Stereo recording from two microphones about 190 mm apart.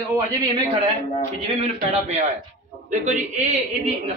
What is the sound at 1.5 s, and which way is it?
A man's voice, 35° right (ahead or behind).